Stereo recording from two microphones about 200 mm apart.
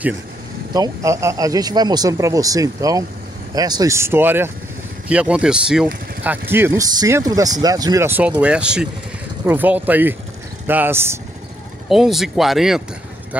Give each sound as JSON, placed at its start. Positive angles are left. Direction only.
{"t": 0.7, "sound": "speech", "side_deg": -15}
{"t": 11.9, "sound": "speech", "side_deg": 0}